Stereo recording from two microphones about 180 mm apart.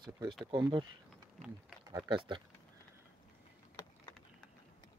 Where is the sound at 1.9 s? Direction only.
30° right (ahead or behind).